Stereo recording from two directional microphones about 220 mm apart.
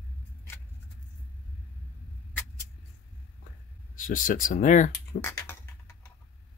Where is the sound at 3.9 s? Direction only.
35° left (ahead or behind).